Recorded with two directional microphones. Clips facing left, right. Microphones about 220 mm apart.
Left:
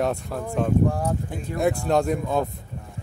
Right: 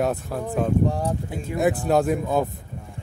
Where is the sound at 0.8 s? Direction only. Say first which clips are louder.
Even; 20° right (ahead or behind).